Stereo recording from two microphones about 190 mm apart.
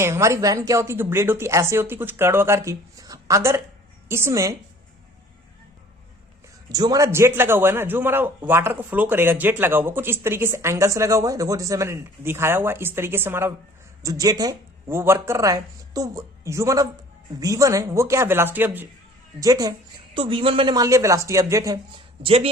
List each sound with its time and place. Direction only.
0.0 s a man's voice: 15° right (ahead or behind)
6.7 s a man's voice: 20° right (ahead or behind)